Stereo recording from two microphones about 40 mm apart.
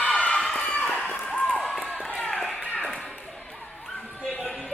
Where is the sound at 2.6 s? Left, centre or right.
Left.